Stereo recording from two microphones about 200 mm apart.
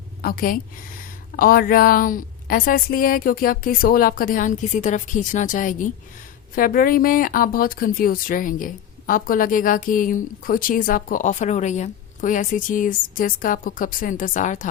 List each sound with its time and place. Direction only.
0.2 s a woman's voice: 50° left (ahead or behind)